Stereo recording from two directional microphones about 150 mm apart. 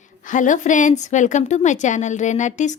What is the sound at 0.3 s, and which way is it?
A woman's voice, 55° left (ahead or behind).